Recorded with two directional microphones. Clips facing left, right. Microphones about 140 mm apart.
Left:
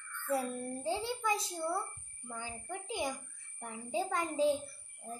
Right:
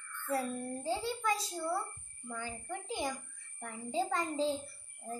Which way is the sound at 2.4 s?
5° left (ahead or behind).